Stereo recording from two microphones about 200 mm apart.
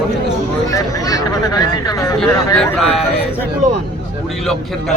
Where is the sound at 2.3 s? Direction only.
15° left (ahead or behind).